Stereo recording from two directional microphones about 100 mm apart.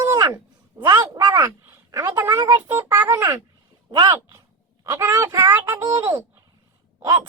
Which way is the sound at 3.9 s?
35° right (ahead or behind).